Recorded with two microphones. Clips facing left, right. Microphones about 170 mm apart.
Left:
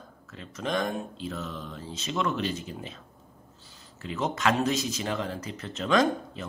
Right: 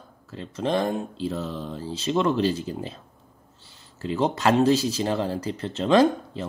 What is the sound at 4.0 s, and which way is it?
Speech, 30° right (ahead or behind).